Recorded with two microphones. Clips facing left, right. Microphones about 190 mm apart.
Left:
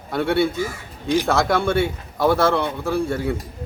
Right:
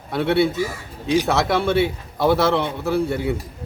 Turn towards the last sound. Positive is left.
turn(degrees=-5)  # may be behind; listen again after turning